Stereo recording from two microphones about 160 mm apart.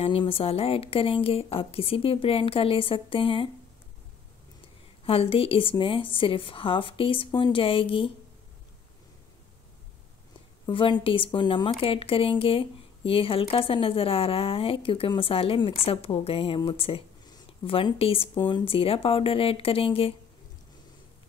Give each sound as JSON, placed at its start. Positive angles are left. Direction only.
{"t": 0.0, "sound": "speech", "side_deg": 35}
{"t": 5.0, "sound": "speech", "side_deg": 35}
{"t": 10.7, "sound": "speech", "side_deg": 30}